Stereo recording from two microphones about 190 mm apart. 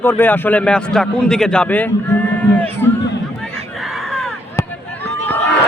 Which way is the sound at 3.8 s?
Centre (ahead or behind).